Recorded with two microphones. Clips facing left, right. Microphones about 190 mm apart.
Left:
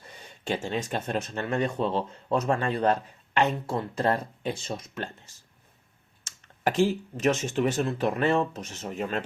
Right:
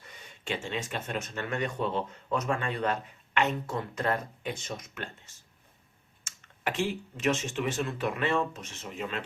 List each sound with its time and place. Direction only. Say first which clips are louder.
0.0 s speech: left 6 dB; 35° left (ahead or behind)